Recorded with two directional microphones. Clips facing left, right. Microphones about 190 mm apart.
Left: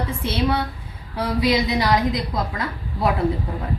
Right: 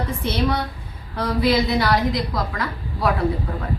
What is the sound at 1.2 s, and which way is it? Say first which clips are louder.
A woman's voice: right 1 dB; 10° left (ahead or behind).